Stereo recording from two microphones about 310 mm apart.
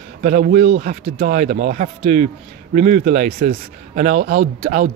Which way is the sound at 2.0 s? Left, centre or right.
Right.